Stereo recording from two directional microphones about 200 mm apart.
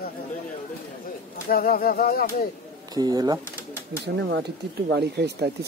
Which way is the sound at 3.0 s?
20° right (ahead or behind).